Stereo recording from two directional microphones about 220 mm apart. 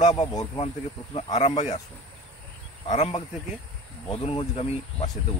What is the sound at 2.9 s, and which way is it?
Speech, 30° left (ahead or behind).